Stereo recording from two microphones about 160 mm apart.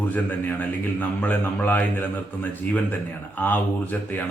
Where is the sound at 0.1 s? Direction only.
10° left (ahead or behind).